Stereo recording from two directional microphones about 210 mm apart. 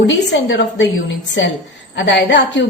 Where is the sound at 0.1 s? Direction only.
60° left (ahead or behind).